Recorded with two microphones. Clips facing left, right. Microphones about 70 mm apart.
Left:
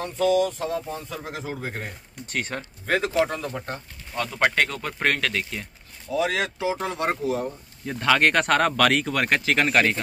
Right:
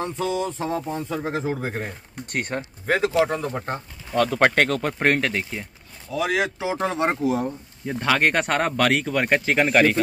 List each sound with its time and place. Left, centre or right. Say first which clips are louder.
0.0 s speech: left 4 dB; right
4.1 s speech: right 8 dB; right
4.4 s speech: right 1 dB; right
4.9 s speech: even; right
6.1 s speech: right 1 dB; centre
6.7 s speech: right 3 dB; right